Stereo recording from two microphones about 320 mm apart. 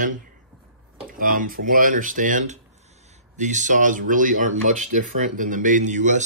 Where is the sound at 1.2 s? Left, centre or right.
Right.